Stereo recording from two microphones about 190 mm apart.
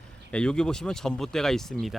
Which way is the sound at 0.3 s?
5° left (ahead or behind).